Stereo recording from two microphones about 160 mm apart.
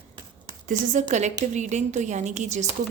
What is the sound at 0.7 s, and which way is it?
A woman's voice, 55° right (ahead or behind).